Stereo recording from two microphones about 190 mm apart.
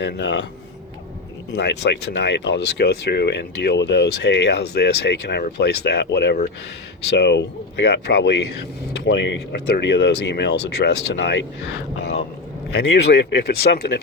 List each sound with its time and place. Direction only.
0.0 s speech: 65° left (ahead or behind)
1.5 s speech: 65° left (ahead or behind)
12.7 s speech: 60° left (ahead or behind)